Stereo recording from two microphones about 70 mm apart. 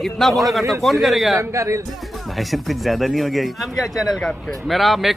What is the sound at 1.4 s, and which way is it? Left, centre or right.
Speech, right.